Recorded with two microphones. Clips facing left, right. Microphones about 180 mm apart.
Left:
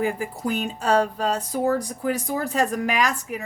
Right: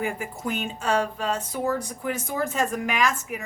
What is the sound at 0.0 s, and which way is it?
A woman's voice, 35° left (ahead or behind).